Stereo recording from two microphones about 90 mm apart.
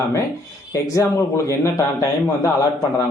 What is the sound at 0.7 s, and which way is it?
A man's voice, 35° left (ahead or behind).